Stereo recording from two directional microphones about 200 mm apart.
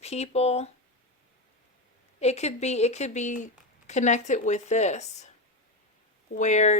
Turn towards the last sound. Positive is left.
turn(degrees=35)  # may be behind; listen again after turning